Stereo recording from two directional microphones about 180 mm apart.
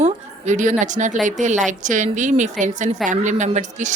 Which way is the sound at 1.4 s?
45° right (ahead or behind).